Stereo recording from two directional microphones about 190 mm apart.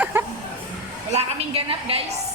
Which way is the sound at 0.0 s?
10° right (ahead or behind).